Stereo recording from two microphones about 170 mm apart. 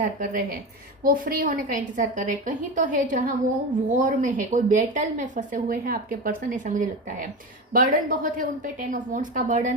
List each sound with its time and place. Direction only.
0.0 s a woman's voice: 55° right (ahead or behind)